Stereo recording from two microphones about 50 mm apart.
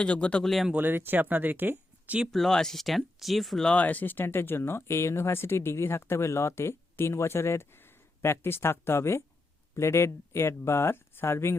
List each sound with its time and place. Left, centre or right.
0.0 s speech: left
0.4 s speech: centre
0.8 s speech: right
2.3 s speech: centre
3.8 s speech: left